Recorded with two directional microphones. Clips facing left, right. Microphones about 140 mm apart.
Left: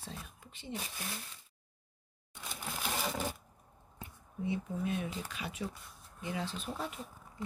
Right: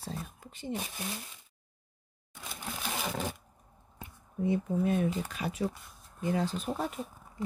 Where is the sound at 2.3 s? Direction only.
5° right (ahead or behind).